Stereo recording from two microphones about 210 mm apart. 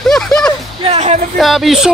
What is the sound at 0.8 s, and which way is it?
Music, 30° right (ahead or behind).